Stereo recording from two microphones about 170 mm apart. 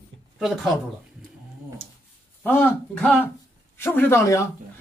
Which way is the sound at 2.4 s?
10° left (ahead or behind).